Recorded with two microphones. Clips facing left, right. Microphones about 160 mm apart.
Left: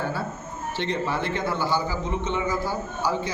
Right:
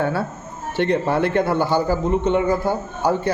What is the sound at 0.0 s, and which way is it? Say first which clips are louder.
A man's voice: right 7 dB; 65° right (ahead or behind).